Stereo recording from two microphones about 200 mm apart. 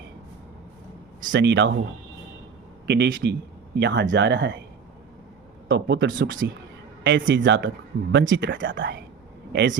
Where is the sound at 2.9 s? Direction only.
60° right (ahead or behind).